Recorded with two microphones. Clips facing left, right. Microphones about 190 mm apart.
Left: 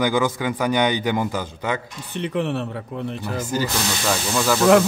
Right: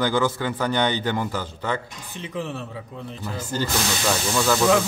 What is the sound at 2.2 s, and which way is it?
Speech, 65° left (ahead or behind).